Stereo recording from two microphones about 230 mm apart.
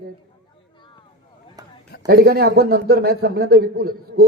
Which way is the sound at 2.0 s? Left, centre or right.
Right.